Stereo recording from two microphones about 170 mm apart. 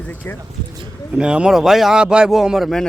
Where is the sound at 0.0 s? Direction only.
10° left (ahead or behind).